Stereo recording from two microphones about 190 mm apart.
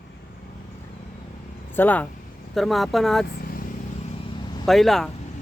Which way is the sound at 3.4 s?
50° left (ahead or behind).